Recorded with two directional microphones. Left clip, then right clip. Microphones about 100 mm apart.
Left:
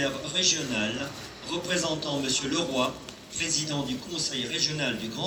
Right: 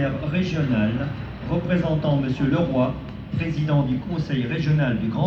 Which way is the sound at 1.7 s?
15° left (ahead or behind).